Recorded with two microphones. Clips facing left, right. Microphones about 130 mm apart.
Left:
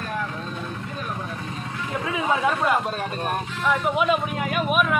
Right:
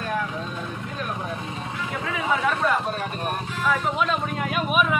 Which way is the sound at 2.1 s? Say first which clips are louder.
Left 1 dB; 25° left (ahead or behind).